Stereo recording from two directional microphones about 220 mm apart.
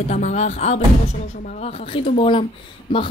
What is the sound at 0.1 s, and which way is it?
A woman's voice, 30° left (ahead or behind).